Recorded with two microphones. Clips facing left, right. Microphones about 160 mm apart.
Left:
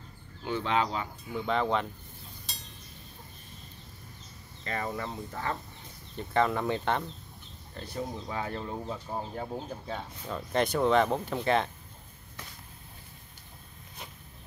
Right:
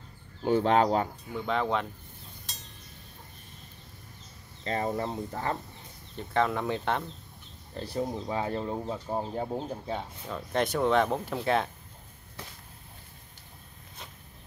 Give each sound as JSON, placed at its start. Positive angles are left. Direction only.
{"t": 0.4, "sound": "speech", "side_deg": -40}
{"t": 1.3, "sound": "speech", "side_deg": 0}
{"t": 4.6, "sound": "speech", "side_deg": -30}
{"t": 6.1, "sound": "speech", "side_deg": 0}
{"t": 7.8, "sound": "speech", "side_deg": -30}
{"t": 10.2, "sound": "speech", "side_deg": 0}